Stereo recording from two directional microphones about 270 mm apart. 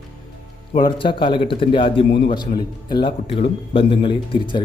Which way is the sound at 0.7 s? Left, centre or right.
Centre.